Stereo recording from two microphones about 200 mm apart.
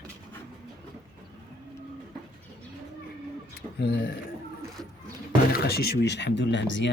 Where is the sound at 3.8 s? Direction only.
55° left (ahead or behind).